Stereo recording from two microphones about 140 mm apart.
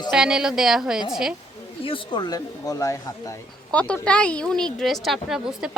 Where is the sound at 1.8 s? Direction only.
40° left (ahead or behind); by 3.3 s 20° left (ahead or behind).